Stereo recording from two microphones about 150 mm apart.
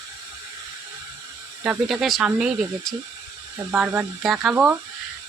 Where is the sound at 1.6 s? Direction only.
5° right (ahead or behind).